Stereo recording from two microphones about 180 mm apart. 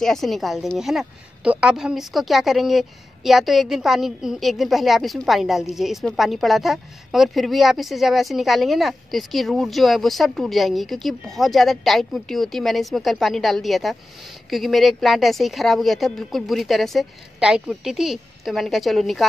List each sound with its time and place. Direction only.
0.0 s a woman's voice: centre (ahead or behind)